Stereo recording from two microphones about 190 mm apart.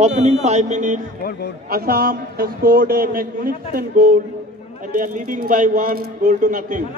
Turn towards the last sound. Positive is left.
turn(degrees=-45)  # may be behind; listen again after turning